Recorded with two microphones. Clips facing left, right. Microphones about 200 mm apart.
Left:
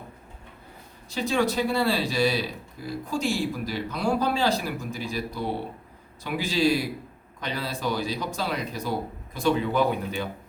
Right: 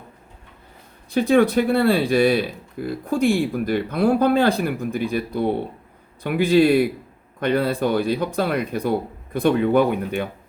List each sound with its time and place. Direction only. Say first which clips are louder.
1.1 s speech: right 9 dB; 55° right (ahead or behind)